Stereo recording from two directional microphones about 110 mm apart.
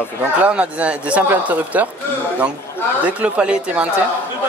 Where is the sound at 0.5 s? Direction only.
10° right (ahead or behind).